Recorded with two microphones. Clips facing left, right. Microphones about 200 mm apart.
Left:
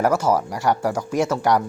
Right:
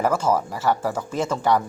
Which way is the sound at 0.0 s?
10° left (ahead or behind).